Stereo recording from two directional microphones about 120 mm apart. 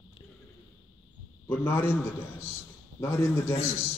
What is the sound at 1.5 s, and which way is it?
A man's voice, 20° left (ahead or behind).